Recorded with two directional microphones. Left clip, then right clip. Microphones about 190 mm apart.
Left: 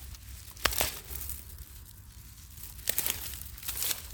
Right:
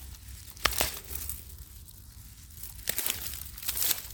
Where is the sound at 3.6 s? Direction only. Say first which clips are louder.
Right 3 dB; 50° right (ahead or behind).